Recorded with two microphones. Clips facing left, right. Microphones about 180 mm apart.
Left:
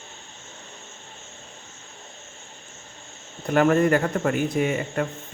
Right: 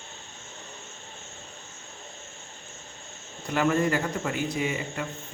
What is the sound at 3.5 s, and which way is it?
Speech, 55° left (ahead or behind).